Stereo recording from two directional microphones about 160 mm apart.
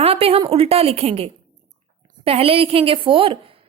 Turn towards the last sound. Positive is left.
turn(degrees=-35)  # may be behind; listen again after turning